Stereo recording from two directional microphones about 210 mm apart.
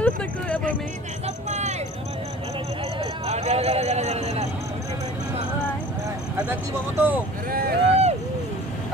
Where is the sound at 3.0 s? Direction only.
30° right (ahead or behind).